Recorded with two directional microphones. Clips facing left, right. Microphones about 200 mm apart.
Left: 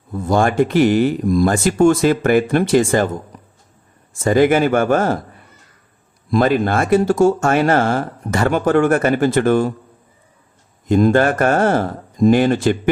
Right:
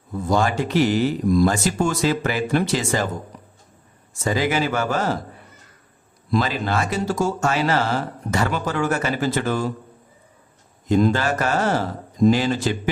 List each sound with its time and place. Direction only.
0.3 s speech: 50° left (ahead or behind)
4.2 s speech: 50° left (ahead or behind)
6.3 s speech: 55° left (ahead or behind)
10.8 s speech: 55° left (ahead or behind)